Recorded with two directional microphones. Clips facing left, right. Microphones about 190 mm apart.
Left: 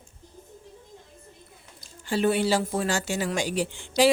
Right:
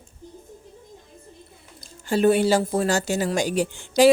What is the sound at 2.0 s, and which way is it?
Speech, 45° right (ahead or behind).